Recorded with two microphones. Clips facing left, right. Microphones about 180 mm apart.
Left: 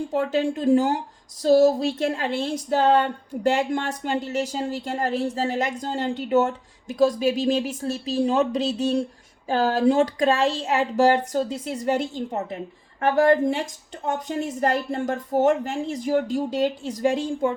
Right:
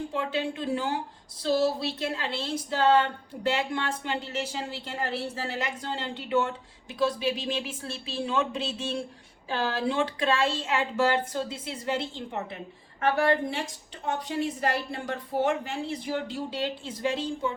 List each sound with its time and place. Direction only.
0.1 s speech: 45° left (ahead or behind)